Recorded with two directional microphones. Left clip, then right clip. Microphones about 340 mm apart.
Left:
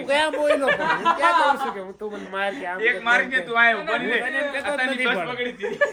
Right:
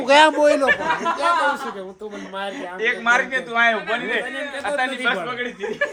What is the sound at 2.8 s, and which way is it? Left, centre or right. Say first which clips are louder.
A man's voice: right 2 dB; right.